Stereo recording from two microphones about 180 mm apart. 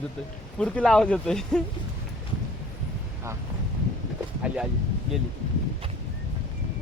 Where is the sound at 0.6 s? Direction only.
5° left (ahead or behind).